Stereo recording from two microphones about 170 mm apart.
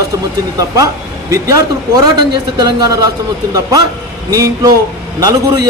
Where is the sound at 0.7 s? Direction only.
20° right (ahead or behind).